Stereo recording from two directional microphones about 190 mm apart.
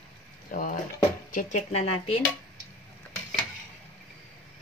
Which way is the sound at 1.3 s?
35° left (ahead or behind).